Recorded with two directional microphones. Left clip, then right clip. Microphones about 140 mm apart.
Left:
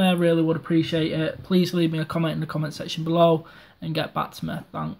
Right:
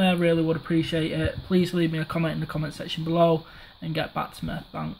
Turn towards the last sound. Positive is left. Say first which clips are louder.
# left 2 dB
turn(degrees=0)  # may be behind; listen again after turning